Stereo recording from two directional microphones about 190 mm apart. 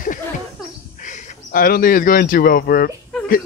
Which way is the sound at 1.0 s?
45° left (ahead or behind).